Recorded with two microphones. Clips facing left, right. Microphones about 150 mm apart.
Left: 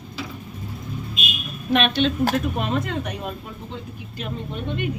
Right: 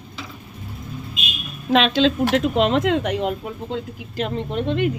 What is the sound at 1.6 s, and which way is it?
Speech, 90° right.